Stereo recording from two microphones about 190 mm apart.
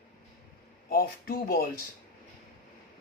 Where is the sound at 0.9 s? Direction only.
50° left (ahead or behind).